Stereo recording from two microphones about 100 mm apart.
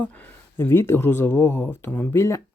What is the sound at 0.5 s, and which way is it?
Speech, 25° left (ahead or behind).